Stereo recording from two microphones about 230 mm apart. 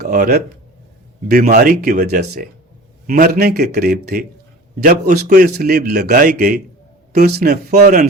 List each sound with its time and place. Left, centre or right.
0.0 s a man's voice: right